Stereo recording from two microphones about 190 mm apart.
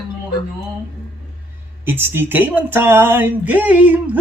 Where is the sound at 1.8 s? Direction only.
10° right (ahead or behind).